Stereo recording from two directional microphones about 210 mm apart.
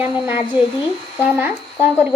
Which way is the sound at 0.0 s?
10° right (ahead or behind).